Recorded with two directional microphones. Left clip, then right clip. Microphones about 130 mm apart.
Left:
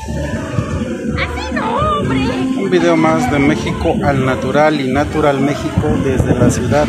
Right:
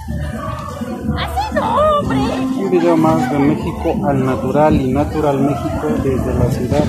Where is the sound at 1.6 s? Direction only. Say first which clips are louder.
Right 2 dB; 45° right (ahead or behind).